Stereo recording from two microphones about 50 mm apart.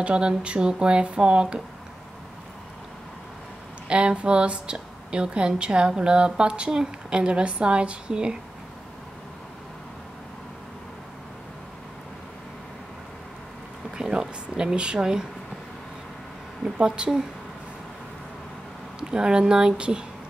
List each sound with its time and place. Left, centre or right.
0.0 s a woman's voice: right
3.9 s a woman's voice: right
13.9 s a sound: centre
16.7 s speech: centre
18.9 s speech: centre